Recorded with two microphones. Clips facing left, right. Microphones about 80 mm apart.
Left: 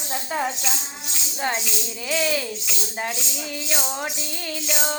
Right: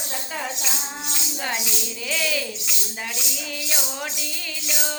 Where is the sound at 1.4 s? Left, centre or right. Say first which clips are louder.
Left 4 dB; left.